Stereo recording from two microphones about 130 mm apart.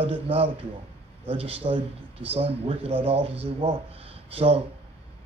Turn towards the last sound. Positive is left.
turn(degrees=-50)  # may be behind; listen again after turning